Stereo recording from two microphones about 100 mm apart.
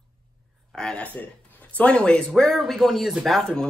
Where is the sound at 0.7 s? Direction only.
10° left (ahead or behind).